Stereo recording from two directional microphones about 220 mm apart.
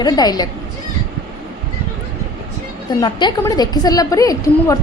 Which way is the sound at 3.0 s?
20° left (ahead or behind).